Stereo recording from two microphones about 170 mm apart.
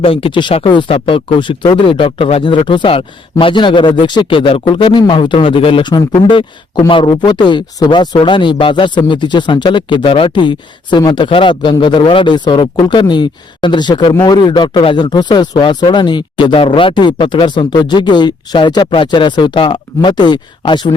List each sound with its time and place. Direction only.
0.0 s speech: 35° left (ahead or behind)